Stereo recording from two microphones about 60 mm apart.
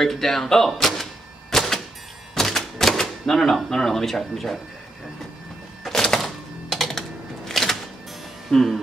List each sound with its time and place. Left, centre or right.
0.0 s speech: centre
1.5 s a sound: centre
2.3 s typewriter: centre
5.9 s typewriter: centre
8.5 s speech: centre